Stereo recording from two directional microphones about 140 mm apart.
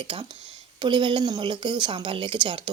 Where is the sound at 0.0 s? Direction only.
40° right (ahead or behind).